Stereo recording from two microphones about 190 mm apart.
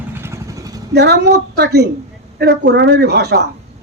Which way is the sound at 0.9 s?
60° right (ahead or behind).